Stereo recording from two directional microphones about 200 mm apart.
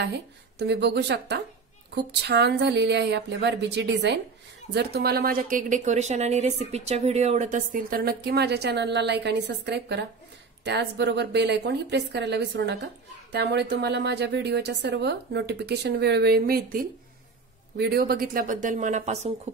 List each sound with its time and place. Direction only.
0.0 s a woman's voice: 55° right (ahead or behind); by 19.3 s 35° right (ahead or behind)